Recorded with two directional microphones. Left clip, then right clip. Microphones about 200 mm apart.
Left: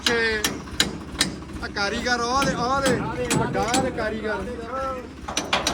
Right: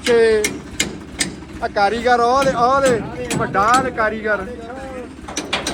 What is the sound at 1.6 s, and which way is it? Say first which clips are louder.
Speech: right 9 dB; 10° left (ahead or behind).